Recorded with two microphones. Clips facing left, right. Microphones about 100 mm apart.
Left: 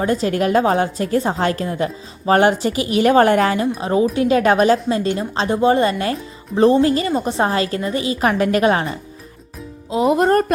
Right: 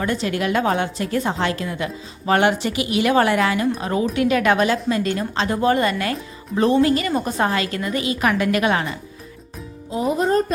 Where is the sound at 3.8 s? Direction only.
25° left (ahead or behind).